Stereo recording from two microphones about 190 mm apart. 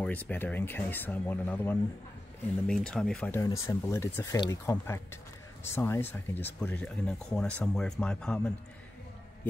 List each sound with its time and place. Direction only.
0.0 s speech: 10° left (ahead or behind)